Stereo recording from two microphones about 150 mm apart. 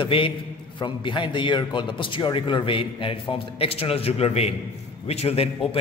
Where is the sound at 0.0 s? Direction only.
35° left (ahead or behind).